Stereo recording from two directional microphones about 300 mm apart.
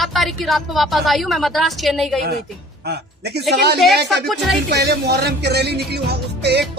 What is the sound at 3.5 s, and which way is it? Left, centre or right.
Speech, right.